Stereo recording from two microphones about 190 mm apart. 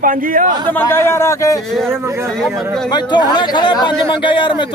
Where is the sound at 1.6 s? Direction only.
Centre (ahead or behind).